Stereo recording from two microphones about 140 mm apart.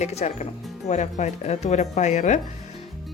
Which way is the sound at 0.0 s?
50° left (ahead or behind).